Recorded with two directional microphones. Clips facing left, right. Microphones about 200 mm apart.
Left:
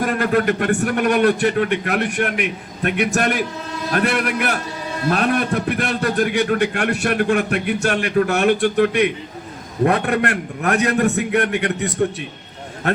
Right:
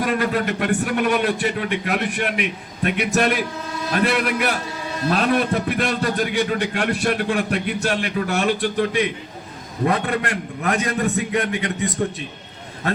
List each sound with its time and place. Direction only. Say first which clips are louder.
0.0 s a man's voice: left 3 dB; 50° left (ahead or behind)